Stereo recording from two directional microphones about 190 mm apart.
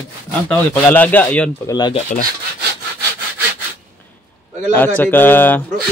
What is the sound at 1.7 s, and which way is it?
Rub, 20° left (ahead or behind).